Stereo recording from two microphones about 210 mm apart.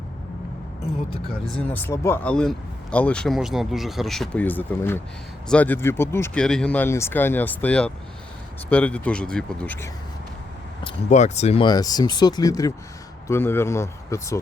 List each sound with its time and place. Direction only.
1.5 s speech: 10° left (ahead or behind)
10.8 s speech: 30° left (ahead or behind); by 14.3 s 15° left (ahead or behind)